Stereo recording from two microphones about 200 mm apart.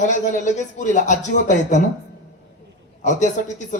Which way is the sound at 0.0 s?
40° left (ahead or behind).